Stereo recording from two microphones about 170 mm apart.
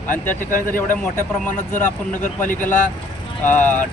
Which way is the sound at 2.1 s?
50° left (ahead or behind).